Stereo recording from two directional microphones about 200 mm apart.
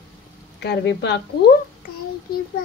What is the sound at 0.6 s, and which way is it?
Speech, 55° left (ahead or behind).